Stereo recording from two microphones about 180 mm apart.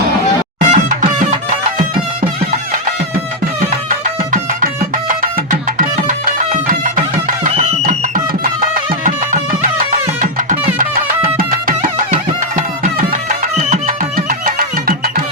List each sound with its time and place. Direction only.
0.6 s music: 45° right (ahead or behind)
3.8 s music: 50° right (ahead or behind)
12.5 s music: 45° right (ahead or behind)